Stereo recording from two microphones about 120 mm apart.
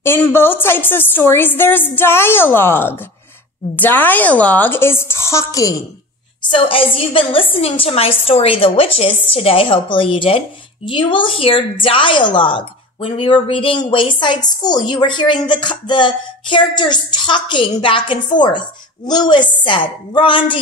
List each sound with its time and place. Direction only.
0.0 s a woman's voice: 20° left (ahead or behind)
6.5 s a woman's voice: 50° left (ahead or behind)